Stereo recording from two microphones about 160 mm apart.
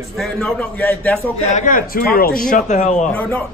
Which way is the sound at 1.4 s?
50° left (ahead or behind).